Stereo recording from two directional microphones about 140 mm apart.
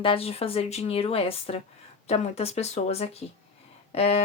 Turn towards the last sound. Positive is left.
turn(degrees=45)  # may be behind; listen again after turning